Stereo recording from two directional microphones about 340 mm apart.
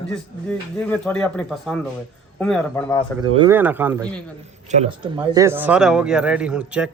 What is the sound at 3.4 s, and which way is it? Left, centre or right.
Speech, centre.